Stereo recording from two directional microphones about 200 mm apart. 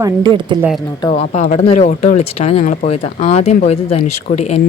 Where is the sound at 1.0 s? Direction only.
30° left (ahead or behind).